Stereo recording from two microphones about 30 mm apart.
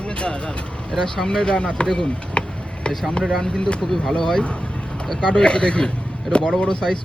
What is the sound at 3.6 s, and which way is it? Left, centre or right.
Speech, left.